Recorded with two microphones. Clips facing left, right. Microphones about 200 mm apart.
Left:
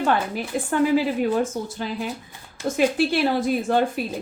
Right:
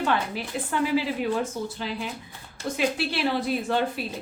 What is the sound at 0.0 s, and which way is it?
A woman's voice, 50° left (ahead or behind).